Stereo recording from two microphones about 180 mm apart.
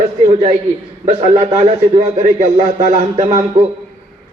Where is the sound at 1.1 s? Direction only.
35° right (ahead or behind).